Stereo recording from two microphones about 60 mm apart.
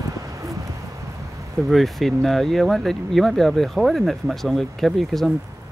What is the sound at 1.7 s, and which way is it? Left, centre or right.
Speech, centre.